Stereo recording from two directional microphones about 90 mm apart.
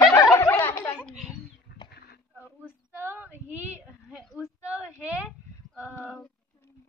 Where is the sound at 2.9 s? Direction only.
25° right (ahead or behind).